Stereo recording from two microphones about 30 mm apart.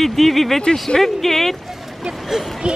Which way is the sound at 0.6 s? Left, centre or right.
Left.